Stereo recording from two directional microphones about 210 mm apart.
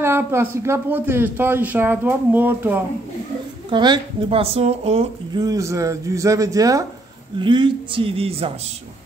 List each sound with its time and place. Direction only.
0.0 s speech: 10° right (ahead or behind)
3.7 s a woman's voice: 20° right (ahead or behind)
5.4 s a woman's voice: 15° right (ahead or behind)